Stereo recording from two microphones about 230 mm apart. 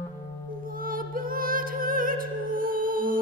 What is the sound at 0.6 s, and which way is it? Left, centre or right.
Music, right.